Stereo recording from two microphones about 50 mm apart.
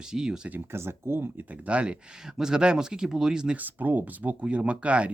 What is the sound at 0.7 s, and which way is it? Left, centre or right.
Speech, right.